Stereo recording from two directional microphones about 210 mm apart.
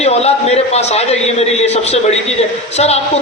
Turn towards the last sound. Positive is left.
turn(degrees=30)  # may be behind; listen again after turning